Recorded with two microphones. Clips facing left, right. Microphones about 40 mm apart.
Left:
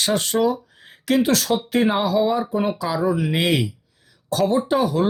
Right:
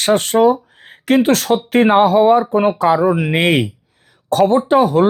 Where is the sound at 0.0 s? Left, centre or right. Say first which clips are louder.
Right 7 dB; right.